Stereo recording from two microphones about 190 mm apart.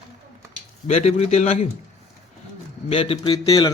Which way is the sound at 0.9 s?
35° left (ahead or behind).